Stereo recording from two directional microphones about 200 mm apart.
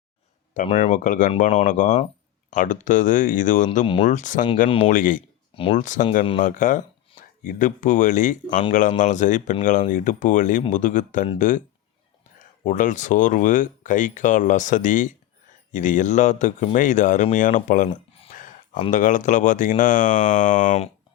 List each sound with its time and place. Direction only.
0.5 s speech: 40° left (ahead or behind)
17.9 s a sound: 40° left (ahead or behind)
18.9 s speech: 40° left (ahead or behind)